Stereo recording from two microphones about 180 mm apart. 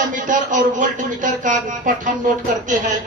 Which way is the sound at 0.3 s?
45° right (ahead or behind).